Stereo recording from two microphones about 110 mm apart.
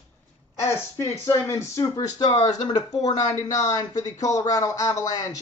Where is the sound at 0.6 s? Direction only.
25° left (ahead or behind).